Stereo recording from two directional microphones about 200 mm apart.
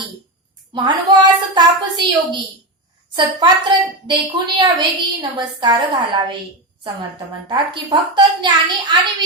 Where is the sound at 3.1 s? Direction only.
25° right (ahead or behind).